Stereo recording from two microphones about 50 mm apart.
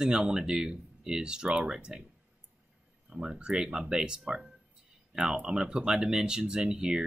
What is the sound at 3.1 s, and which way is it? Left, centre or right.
Speech, centre.